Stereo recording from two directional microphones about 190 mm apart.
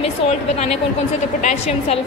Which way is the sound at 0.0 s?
35° left (ahead or behind).